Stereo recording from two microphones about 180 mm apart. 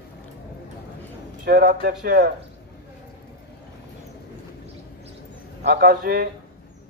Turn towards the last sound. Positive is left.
turn(degrees=-55)  # may be behind; listen again after turning